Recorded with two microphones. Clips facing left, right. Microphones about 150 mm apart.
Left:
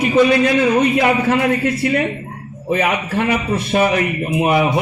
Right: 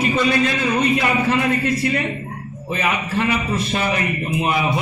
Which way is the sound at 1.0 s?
65° left (ahead or behind).